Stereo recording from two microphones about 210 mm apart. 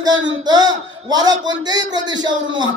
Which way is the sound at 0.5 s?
20° right (ahead or behind).